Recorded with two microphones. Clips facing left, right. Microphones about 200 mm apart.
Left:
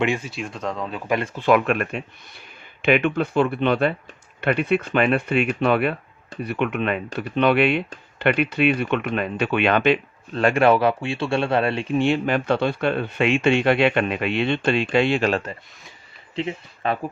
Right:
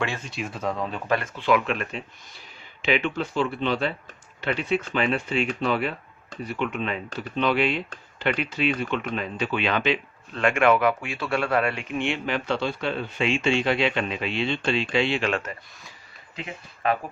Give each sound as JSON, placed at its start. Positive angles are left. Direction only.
{"t": 0.3, "sound": "speech", "side_deg": 0}
{"t": 1.4, "sound": "speech", "side_deg": 50}
{"t": 10.3, "sound": "speech", "side_deg": 35}